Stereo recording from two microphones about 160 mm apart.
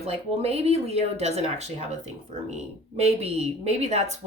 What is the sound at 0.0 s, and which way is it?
A woman's voice, 40° right (ahead or behind).